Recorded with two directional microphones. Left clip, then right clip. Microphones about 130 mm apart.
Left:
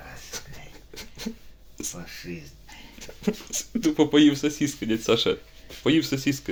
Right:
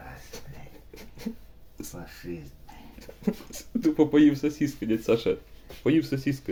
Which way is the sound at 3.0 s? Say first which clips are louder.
Left 3 dB; 35° right (ahead or behind).